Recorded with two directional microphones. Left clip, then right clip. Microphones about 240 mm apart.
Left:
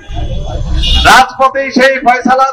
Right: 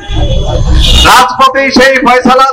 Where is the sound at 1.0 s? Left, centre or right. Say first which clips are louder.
Right 2 dB; right.